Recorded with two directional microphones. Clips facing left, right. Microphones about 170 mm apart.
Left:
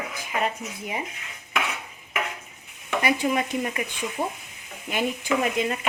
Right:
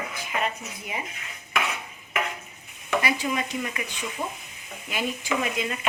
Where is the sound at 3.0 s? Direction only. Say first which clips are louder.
Left 6 dB; 45° left (ahead or behind).